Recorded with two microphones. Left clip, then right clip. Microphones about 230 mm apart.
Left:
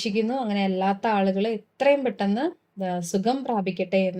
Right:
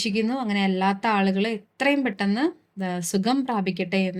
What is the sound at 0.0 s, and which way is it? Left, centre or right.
Speech, right.